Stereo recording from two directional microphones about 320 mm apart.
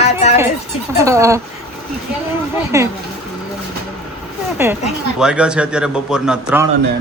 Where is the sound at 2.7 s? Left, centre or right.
Centre.